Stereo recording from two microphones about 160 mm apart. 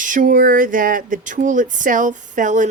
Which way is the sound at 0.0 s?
55° right (ahead or behind).